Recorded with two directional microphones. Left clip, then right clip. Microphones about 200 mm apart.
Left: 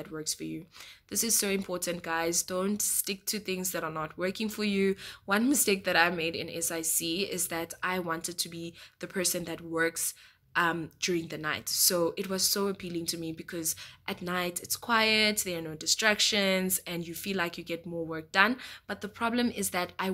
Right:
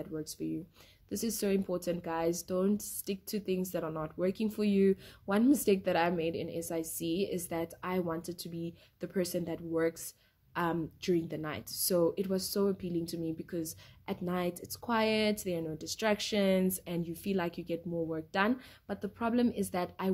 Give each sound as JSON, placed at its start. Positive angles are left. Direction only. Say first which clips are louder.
{"t": 0.0, "sound": "speech", "louder": "left 2 dB", "side_deg": 10}